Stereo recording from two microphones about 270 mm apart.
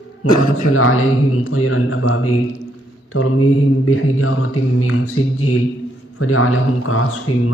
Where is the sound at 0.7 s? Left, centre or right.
Left.